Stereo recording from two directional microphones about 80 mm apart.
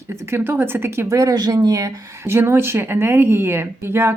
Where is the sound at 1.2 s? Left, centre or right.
Right.